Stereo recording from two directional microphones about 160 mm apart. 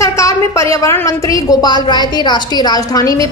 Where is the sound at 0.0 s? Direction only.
20° left (ahead or behind).